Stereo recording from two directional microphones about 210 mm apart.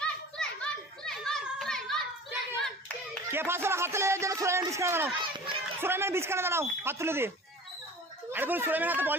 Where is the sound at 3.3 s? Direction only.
10° right (ahead or behind).